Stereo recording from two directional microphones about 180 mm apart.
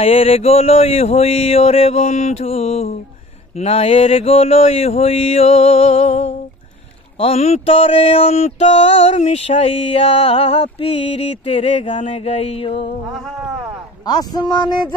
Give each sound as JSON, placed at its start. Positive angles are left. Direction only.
{"t": 0.0, "sound": "mantra", "side_deg": 30}
{"t": 14.0, "sound": "speech", "side_deg": 20}